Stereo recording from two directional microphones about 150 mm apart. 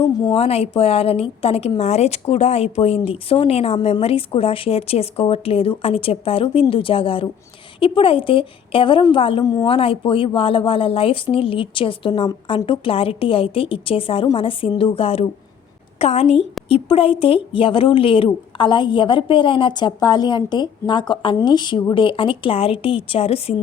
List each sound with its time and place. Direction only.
0.3 s speech: 40° left (ahead or behind)
9.4 s a woman's voice: 25° left (ahead or behind)
9.6 s speech: 35° left (ahead or behind)